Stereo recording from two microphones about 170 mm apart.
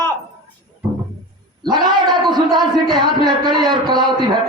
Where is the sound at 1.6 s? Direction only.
25° right (ahead or behind).